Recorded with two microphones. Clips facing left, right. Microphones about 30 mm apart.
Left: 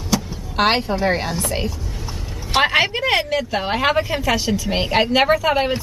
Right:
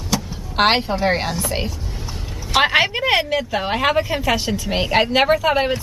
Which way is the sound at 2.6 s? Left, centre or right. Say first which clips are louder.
Even; centre.